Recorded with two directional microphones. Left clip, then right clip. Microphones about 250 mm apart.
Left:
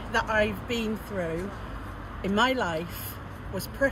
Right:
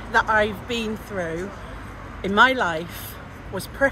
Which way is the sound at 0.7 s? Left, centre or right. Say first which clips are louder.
Right 3 dB; right.